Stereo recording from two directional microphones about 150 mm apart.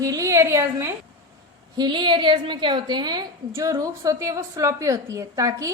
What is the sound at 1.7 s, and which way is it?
A woman's voice, 30° right (ahead or behind).